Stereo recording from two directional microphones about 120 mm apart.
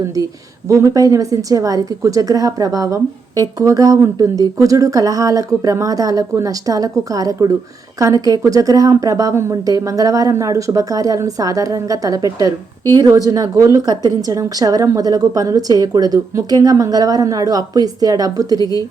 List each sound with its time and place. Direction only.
0.7 s a woman's voice: 25° right (ahead or behind)
18.6 s a woman's voice: 30° left (ahead or behind)